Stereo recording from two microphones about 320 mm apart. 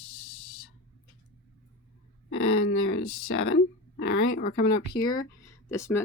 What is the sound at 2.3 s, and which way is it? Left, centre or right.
Speech, left.